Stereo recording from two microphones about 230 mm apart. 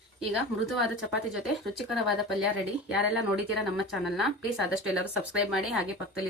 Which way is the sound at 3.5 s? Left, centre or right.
Centre.